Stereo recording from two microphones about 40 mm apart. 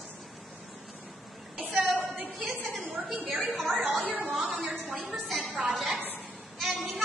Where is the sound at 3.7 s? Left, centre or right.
Right.